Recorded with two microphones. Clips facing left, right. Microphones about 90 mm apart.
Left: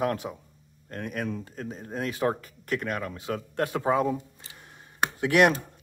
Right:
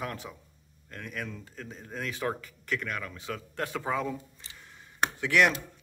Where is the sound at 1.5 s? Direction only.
40° left (ahead or behind).